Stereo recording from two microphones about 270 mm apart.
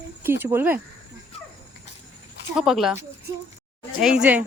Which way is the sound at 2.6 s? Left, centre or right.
Centre.